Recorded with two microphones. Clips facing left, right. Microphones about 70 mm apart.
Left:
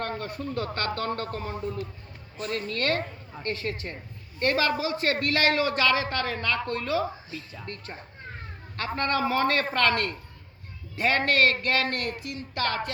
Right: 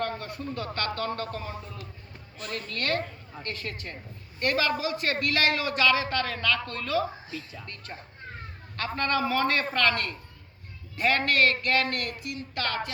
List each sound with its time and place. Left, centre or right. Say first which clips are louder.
0.2 s a man's voice: left 3 dB; left
9.0 s a man's voice: left 1 dB; left